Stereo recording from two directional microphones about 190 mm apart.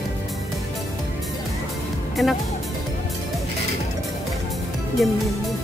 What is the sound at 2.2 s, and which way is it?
Music, centre (ahead or behind).